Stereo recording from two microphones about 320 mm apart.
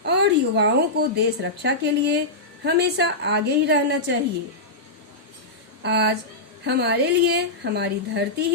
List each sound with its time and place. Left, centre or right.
0.0 s a woman's voice: right
5.8 s a woman's voice: right